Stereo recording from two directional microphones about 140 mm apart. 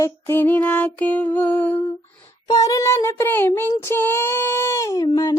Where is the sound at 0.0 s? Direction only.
15° left (ahead or behind).